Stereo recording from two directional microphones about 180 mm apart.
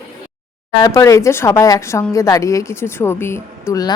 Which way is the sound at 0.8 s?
15° left (ahead or behind).